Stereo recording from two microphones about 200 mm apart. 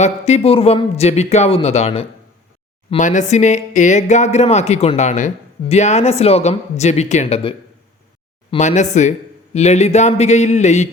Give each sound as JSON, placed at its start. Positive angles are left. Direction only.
{"t": 0.0, "sound": "speech", "side_deg": 35}